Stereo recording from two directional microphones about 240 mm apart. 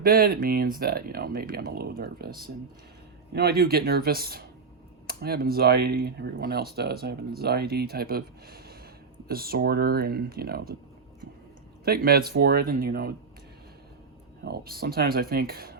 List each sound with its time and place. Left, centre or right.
0.0 s speech: right
3.3 s speech: right
11.9 s speech: right
14.4 s speech: right